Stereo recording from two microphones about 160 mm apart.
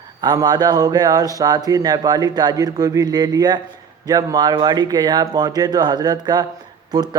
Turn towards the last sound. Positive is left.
turn(degrees=-25)  # may be behind; listen again after turning